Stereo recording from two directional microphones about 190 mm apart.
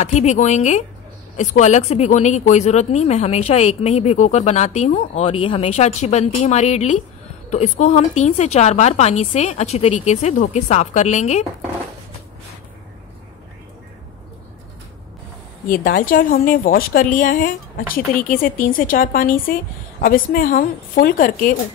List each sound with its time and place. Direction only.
0.0 s speech: 35° left (ahead or behind)
15.7 s a woman's voice: 50° left (ahead or behind)